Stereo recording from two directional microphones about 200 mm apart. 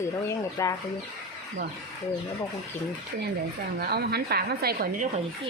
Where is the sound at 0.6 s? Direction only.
15° left (ahead or behind).